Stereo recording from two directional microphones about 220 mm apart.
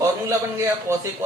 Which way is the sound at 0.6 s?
15° right (ahead or behind).